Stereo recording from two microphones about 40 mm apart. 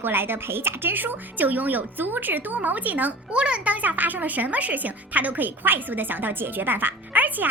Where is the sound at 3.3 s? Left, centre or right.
Right.